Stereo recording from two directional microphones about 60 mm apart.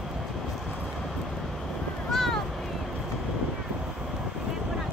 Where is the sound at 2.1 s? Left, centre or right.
Centre.